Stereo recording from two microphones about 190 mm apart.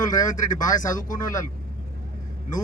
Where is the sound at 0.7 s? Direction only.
45° left (ahead or behind).